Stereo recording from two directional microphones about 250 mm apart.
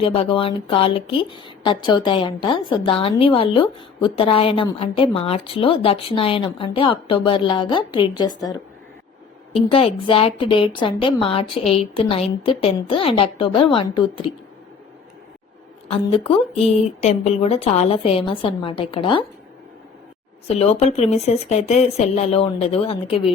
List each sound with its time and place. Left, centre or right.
0.0 s a woman's voice: left
9.6 s a woman's voice: left
15.9 s a woman's voice: left
20.5 s a woman's voice: left